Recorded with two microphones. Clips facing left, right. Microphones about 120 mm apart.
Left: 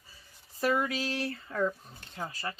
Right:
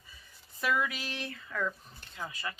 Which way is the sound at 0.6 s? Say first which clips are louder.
Left 3 dB; 35° left (ahead or behind).